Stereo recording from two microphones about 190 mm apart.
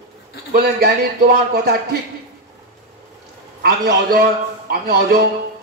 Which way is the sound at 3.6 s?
55° right (ahead or behind).